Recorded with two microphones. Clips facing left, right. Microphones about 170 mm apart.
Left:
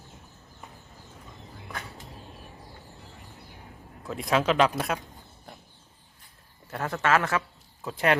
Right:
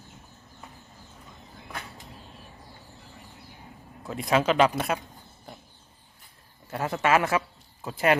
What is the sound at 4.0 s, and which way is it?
Speech, centre (ahead or behind).